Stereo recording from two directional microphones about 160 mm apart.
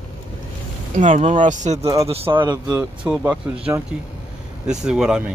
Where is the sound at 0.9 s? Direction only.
50° right (ahead or behind).